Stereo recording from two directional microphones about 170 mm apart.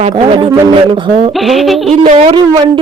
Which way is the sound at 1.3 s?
Centre (ahead or behind).